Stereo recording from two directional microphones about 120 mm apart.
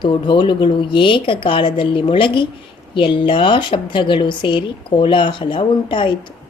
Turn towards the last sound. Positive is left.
turn(degrees=45)  # may be behind; listen again after turning